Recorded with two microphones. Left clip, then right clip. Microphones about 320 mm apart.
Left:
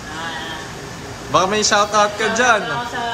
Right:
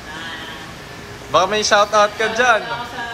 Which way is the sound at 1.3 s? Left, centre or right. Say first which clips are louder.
Right 1 dB; centre.